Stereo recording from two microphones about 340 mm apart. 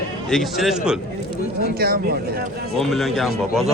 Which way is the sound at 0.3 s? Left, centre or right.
Centre.